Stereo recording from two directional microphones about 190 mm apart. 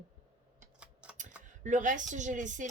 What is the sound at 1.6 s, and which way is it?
Speech, 40° right (ahead or behind).